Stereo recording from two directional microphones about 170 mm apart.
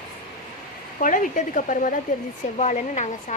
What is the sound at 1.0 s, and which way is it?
Speech, 50° left (ahead or behind).